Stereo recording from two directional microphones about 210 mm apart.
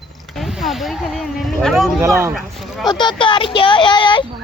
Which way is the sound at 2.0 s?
10° right (ahead or behind).